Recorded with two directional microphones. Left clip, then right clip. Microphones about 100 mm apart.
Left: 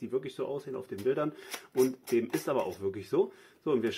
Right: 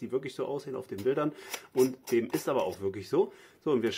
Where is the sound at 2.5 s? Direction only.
30° right (ahead or behind).